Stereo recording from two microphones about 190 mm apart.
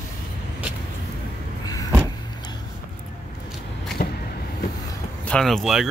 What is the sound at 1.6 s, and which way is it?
Power windows, 20° left (ahead or behind).